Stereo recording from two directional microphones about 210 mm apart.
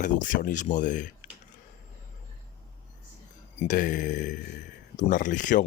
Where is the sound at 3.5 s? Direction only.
40° left (ahead or behind).